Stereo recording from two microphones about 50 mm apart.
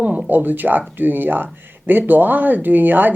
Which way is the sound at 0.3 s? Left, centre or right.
Right.